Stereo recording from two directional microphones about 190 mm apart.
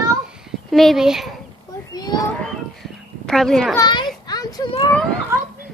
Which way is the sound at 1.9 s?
20° left (ahead or behind).